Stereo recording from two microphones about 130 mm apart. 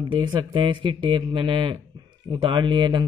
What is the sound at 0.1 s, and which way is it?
A man's voice, 35° right (ahead or behind).